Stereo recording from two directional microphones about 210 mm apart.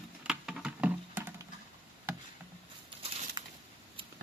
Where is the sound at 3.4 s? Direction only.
20° right (ahead or behind).